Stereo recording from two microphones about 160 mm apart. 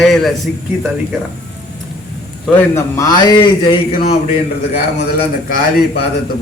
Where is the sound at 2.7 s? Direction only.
20° left (ahead or behind).